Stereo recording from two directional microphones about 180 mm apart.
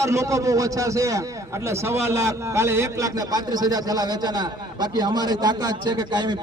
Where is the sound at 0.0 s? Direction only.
15° right (ahead or behind).